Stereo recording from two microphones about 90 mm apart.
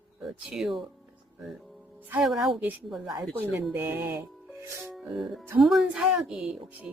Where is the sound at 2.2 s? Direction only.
5° right (ahead or behind).